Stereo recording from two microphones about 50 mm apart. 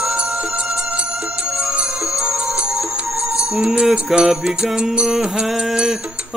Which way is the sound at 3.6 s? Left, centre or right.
Centre.